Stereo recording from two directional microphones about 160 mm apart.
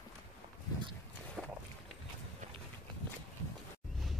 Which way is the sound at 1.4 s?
5° right (ahead or behind).